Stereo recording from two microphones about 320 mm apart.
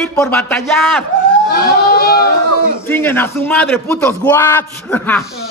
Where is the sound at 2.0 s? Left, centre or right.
Left.